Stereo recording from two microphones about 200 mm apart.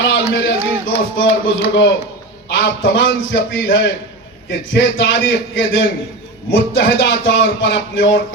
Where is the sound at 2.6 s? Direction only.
65° left (ahead or behind).